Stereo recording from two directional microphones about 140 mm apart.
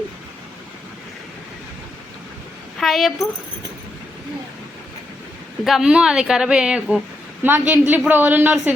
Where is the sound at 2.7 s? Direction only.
Centre (ahead or behind).